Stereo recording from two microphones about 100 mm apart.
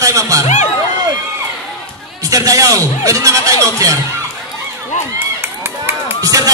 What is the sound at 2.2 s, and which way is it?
A man's voice, 35° right (ahead or behind).